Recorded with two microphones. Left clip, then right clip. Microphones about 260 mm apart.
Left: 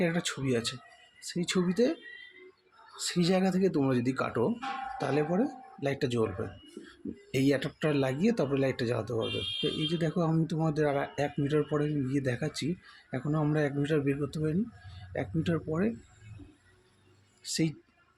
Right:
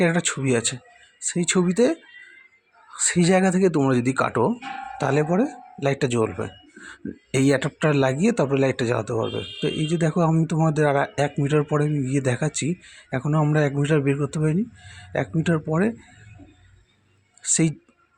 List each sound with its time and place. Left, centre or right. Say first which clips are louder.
0.0 s speech: right 9 dB; right
17.4 s speech: right 9 dB; right